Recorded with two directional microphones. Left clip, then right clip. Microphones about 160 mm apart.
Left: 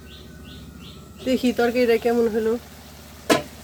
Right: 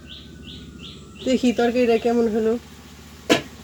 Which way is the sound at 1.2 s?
45° right (ahead or behind).